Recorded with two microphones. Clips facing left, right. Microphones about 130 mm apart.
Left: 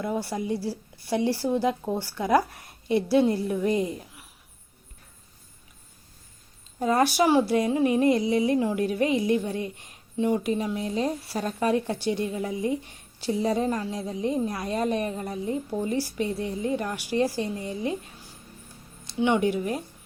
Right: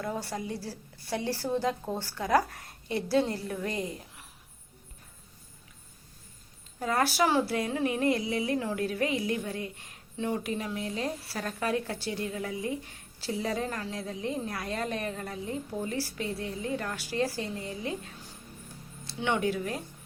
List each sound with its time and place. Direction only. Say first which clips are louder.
0.0 s a woman's voice: left 5 dB; 15° left (ahead or behind)
6.7 s speech: left 5 dB; 20° left (ahead or behind)
19.0 s speech: left 6 dB; 15° left (ahead or behind)